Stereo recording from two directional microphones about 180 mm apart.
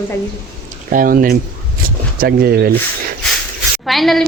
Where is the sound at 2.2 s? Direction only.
60° right (ahead or behind).